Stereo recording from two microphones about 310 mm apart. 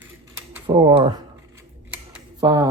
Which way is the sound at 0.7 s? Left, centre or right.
Centre.